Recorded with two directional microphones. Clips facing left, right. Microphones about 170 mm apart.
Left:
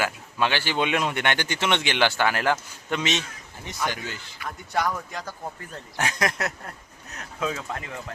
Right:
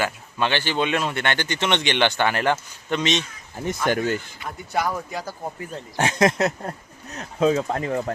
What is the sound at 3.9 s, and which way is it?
Speech, 50° right (ahead or behind).